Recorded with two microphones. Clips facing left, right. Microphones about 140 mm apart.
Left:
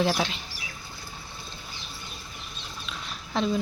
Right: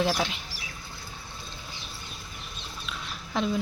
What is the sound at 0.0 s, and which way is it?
Speech, 5° left (ahead or behind).